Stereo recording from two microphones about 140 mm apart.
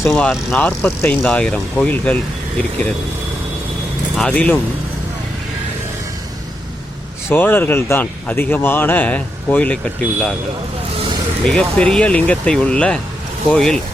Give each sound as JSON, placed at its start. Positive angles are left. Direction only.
{"t": 0.1, "sound": "speech", "side_deg": 5}
{"t": 4.2, "sound": "speech", "side_deg": 10}
{"t": 7.3, "sound": "speech", "side_deg": 15}
{"t": 10.9, "sound": "vehicle", "side_deg": -40}
{"t": 11.4, "sound": "speech", "side_deg": 5}